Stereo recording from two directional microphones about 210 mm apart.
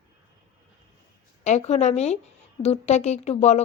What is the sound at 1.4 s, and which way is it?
Speech, 35° left (ahead or behind).